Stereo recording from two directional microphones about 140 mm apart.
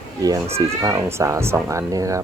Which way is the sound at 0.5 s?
20° right (ahead or behind).